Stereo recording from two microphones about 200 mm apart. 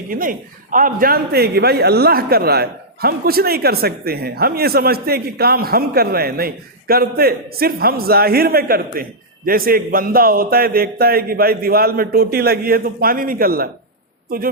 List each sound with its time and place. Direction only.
0.1 s a man's voice: 45° right (ahead or behind)